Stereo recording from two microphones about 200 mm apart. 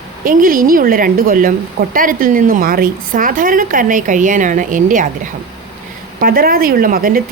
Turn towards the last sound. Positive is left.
turn(degrees=-45)  # may be behind; listen again after turning